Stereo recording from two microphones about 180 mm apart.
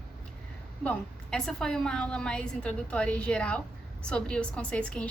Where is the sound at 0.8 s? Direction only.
5° left (ahead or behind).